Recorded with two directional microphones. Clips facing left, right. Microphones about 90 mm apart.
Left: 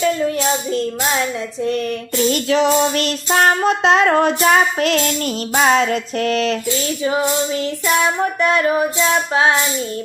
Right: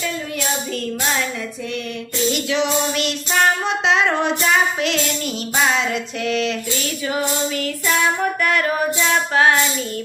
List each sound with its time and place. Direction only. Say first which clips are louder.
0.0 s music: left 8 dB; 30° left (ahead or behind)
2.3 s child singing: left 5 dB; 40° left (ahead or behind)
6.7 s music: left 5 dB; 30° left (ahead or behind)